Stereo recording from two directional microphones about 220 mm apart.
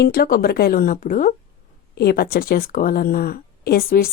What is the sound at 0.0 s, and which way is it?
Speech, 45° left (ahead or behind).